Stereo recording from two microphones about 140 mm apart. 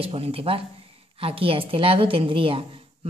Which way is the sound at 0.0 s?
40° right (ahead or behind).